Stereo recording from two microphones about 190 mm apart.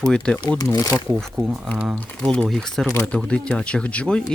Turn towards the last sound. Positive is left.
turn(degrees=5)  # may be behind; listen again after turning